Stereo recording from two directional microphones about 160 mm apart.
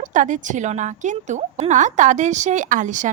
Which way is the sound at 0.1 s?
55° right (ahead or behind).